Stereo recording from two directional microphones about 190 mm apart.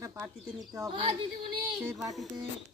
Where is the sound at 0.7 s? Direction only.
20° right (ahead or behind).